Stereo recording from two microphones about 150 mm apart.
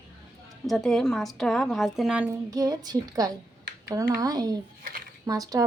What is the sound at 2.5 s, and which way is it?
A woman's voice, 25° right (ahead or behind).